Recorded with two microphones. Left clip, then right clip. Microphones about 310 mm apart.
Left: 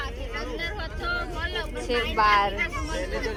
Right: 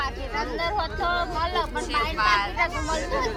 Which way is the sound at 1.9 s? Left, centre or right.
Centre.